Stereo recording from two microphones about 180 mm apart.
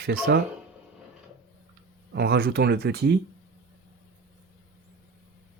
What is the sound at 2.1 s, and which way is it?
Speech, 65° right (ahead or behind).